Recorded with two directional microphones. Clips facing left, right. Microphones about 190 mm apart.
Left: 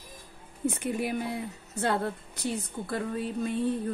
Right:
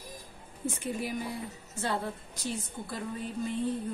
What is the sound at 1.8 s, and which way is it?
Speech, 65° left (ahead or behind).